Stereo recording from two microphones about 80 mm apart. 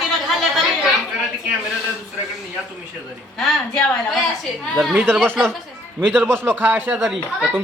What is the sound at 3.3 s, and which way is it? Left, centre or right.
Speech, centre.